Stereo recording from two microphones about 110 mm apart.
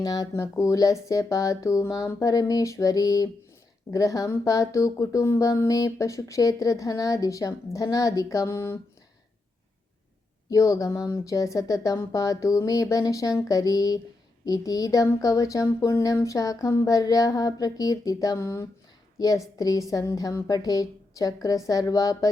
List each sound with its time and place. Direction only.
0.0 s speech: 35° left (ahead or behind)
10.5 s speech: 30° left (ahead or behind)